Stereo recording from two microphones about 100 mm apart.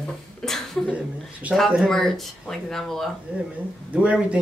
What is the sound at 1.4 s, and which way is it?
Speech, 15° right (ahead or behind).